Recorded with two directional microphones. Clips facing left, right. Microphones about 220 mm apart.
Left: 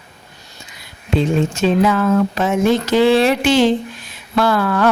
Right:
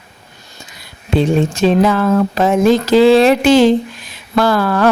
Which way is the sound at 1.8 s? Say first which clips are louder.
Right 2 dB; 35° right (ahead or behind).